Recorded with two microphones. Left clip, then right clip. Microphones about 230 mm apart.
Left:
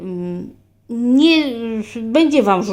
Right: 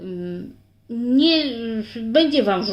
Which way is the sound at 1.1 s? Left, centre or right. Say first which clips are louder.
Left 4 dB; left.